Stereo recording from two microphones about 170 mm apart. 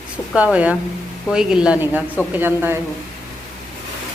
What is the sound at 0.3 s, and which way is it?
A woman's voice, 5° right (ahead or behind).